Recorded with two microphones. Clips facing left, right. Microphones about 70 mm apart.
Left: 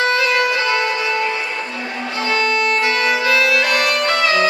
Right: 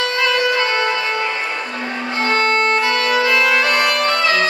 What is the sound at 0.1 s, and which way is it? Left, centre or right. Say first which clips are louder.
Music: left 1 dB; right.